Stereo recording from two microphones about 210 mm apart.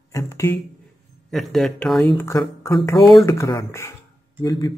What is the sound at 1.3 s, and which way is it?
A man's voice, centre (ahead or behind).